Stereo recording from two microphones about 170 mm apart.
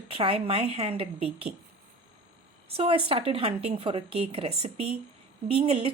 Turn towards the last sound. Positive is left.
turn(degrees=-30)  # may be behind; listen again after turning